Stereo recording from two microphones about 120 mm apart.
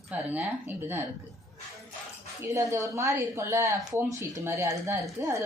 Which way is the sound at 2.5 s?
25° right (ahead or behind).